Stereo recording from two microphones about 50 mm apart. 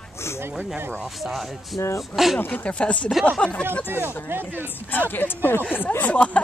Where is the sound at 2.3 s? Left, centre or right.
Left.